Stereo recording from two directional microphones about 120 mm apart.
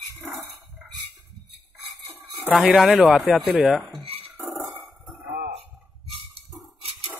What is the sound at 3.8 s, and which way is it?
Cutlery, centre (ahead or behind).